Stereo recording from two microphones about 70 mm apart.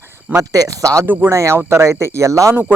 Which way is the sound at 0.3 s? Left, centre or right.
Right.